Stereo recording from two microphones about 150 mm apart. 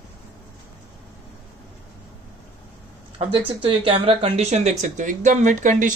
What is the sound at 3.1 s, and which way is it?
Speech, 40° right (ahead or behind).